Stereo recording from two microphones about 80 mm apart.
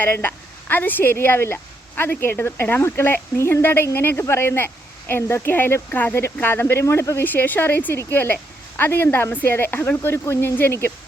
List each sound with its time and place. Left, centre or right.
0.0 s a woman's voice: left
7.3 s a woman's voice: left